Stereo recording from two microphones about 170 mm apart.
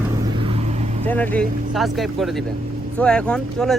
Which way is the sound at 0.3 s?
35° right (ahead or behind).